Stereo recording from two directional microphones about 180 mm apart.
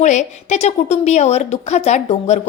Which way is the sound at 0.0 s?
40° left (ahead or behind).